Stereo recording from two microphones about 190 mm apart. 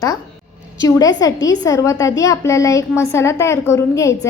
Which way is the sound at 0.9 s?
20° left (ahead or behind).